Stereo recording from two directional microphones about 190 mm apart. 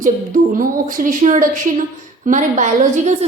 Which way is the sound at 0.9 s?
45° right (ahead or behind).